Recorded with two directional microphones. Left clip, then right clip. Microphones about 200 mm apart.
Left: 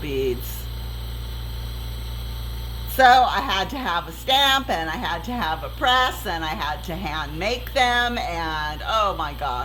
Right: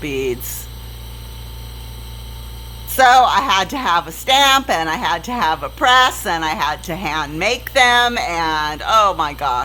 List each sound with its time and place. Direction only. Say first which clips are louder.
0.0 s speech: right 3 dB; 30° right (ahead or behind)
2.9 s a woman's voice: right 4 dB; 35° right (ahead or behind)